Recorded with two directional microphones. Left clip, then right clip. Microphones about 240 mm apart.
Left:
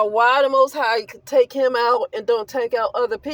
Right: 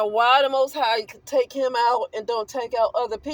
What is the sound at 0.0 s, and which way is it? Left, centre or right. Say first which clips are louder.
Speech: left 2 dB; left.